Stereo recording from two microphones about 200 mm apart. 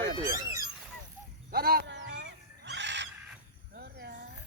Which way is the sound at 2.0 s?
60° right (ahead or behind).